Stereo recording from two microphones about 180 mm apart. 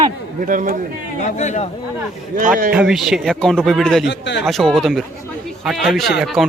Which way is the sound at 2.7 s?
Centre (ahead or behind).